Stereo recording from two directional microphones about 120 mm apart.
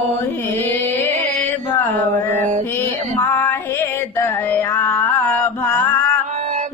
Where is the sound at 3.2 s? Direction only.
15° left (ahead or behind).